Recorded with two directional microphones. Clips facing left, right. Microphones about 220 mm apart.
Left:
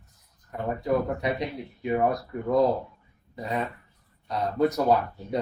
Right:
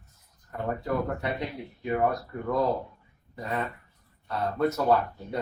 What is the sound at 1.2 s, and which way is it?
Speech, 20° left (ahead or behind).